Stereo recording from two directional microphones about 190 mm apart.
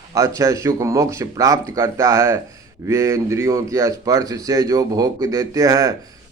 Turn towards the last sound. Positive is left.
turn(degrees=-15)  # may be behind; listen again after turning